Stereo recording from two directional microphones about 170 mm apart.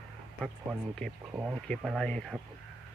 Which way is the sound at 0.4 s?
Centre (ahead or behind).